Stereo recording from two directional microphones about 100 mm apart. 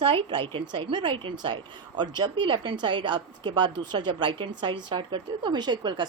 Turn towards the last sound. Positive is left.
turn(degrees=-50)  # may be behind; listen again after turning